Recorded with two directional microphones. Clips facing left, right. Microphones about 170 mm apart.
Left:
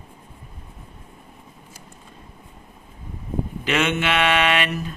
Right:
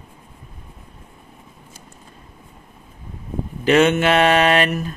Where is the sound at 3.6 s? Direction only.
40° right (ahead or behind).